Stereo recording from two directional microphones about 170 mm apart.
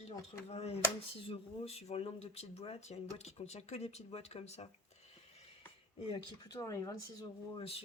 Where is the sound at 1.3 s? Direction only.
35° left (ahead or behind).